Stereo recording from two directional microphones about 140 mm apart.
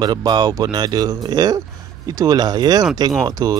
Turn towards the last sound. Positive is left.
turn(degrees=-25)  # may be behind; listen again after turning